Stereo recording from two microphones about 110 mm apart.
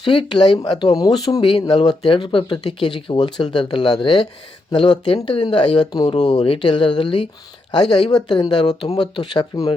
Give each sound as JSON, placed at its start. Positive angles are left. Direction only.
{"t": 0.0, "sound": "speech", "side_deg": 50}
{"t": 6.1, "sound": "speech", "side_deg": 85}